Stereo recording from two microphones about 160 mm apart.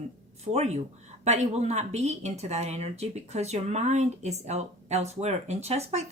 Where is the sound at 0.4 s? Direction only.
40° right (ahead or behind).